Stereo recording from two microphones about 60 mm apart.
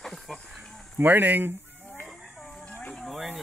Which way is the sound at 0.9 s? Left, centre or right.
Right.